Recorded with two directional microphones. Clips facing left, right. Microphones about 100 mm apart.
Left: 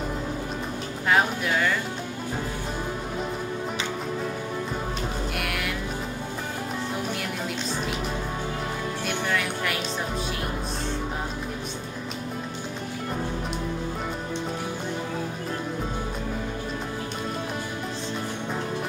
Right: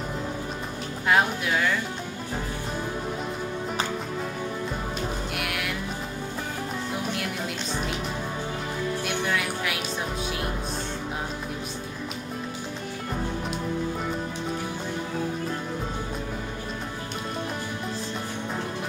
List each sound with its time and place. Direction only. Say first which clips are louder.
1.0 s speech: even; centre (ahead or behind)
5.3 s music: left 1 dB; centre (ahead or behind)
9.0 s speech: left 3 dB; 5° right (ahead or behind)